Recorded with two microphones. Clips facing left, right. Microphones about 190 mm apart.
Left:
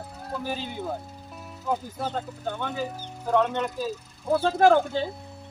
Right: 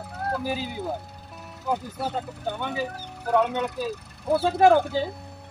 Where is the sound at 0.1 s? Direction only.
65° right (ahead or behind).